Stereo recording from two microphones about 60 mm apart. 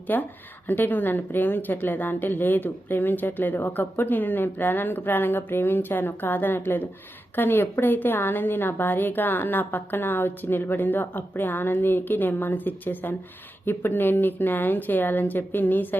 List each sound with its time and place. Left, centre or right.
0.1 s speech: left